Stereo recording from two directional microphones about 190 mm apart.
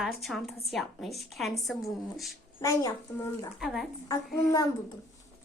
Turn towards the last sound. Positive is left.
turn(degrees=20)  # may be behind; listen again after turning